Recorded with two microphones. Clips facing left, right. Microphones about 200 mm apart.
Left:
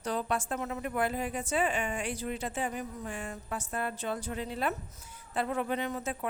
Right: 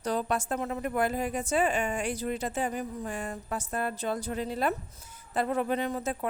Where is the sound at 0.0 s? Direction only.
40° right (ahead or behind).